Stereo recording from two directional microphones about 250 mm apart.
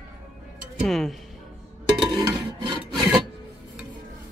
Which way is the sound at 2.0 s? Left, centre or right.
Centre.